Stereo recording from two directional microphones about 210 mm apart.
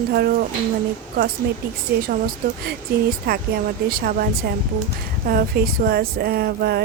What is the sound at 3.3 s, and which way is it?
Speech, 45° right (ahead or behind).